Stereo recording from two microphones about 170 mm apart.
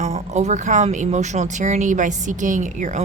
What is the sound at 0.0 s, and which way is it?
Speech, 40° right (ahead or behind).